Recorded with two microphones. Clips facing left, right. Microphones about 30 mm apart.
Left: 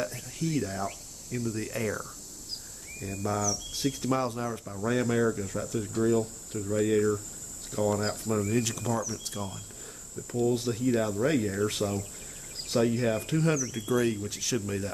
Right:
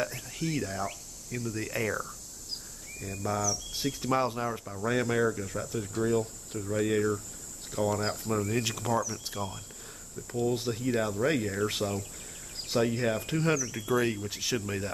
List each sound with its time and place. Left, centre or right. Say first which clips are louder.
0.3 s speech: left 2 dB; centre
3.0 s speech: left 1 dB; centre
4.1 s speech: right 4 dB; centre
8.6 s speech: right 1 dB; centre
10.1 s speech: left 2 dB; centre